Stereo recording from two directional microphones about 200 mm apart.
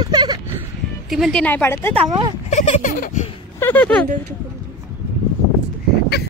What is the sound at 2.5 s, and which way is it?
Speech, 35° left (ahead or behind).